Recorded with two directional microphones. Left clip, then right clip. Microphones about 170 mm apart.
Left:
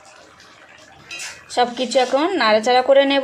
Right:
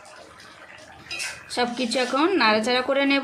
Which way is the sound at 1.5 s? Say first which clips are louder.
Left 7 dB; 20° left (ahead or behind).